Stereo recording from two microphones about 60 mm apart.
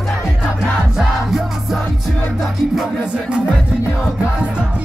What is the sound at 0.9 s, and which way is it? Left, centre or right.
Music, centre.